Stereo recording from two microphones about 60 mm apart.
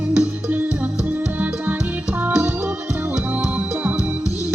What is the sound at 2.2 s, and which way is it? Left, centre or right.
Music, right.